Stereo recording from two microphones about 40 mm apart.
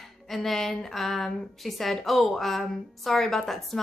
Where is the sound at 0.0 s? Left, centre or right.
Centre.